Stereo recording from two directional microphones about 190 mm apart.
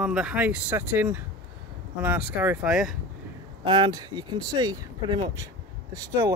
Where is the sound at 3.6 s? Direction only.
25° right (ahead or behind).